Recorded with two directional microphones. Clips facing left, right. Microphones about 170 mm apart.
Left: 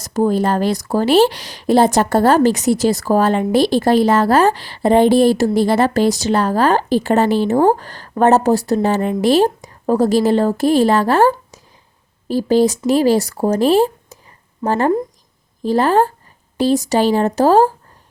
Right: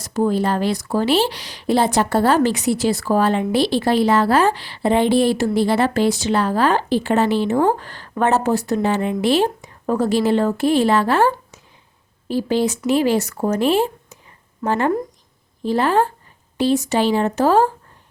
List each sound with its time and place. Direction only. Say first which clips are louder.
0.0 s speech: left 3 dB; 40° left (ahead or behind)